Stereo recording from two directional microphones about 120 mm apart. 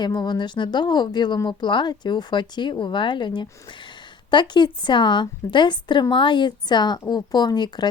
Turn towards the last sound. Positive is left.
turn(degrees=35)  # may be behind; listen again after turning